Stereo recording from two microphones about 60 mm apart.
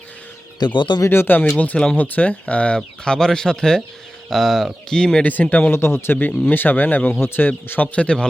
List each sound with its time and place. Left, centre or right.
1.1 s speech: left
1.4 s speech: left
5.2 s speech: left
5.7 s speech: left
7.9 s speech: centre